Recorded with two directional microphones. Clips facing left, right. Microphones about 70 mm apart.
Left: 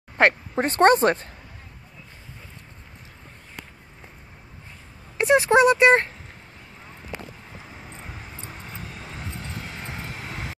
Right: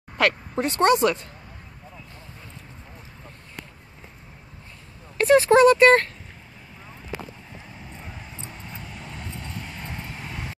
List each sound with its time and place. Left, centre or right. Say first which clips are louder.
0.2 s speech: left 3 dB; left
5.1 s speech: right 1 dB; centre
7.9 s vehicle: even; centre